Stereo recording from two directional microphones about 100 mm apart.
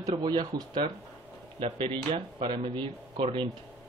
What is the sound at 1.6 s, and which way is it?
Speech, 55° right (ahead or behind).